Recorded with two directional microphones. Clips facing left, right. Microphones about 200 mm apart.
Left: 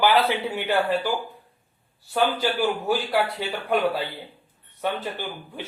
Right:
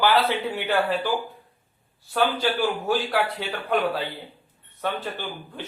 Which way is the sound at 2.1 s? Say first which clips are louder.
Even; 10° left (ahead or behind).